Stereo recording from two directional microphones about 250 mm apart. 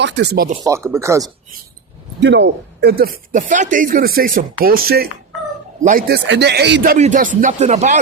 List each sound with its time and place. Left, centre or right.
0.0 s speech: right
0.6 s speech: centre
2.2 s speech: right
6.9 s speech: right